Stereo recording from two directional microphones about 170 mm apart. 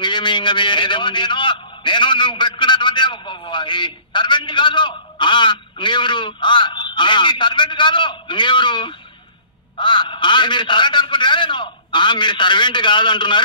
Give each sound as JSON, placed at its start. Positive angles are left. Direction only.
{"t": 0.0, "sound": "a man's voice", "side_deg": 30}